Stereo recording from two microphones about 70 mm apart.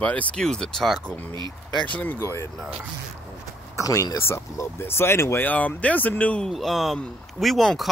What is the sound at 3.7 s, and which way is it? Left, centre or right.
Speech, left.